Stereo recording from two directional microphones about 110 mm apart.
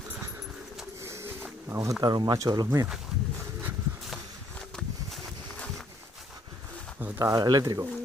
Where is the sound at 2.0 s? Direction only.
40° right (ahead or behind).